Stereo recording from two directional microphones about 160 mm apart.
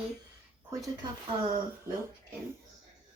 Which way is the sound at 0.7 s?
20° right (ahead or behind).